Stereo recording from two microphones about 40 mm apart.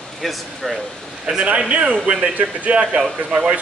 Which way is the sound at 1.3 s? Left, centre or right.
Right.